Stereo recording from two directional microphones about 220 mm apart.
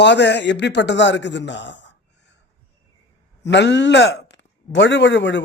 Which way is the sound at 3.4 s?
50° left (ahead or behind).